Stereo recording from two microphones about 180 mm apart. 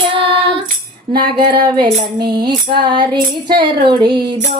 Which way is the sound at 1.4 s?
25° right (ahead or behind).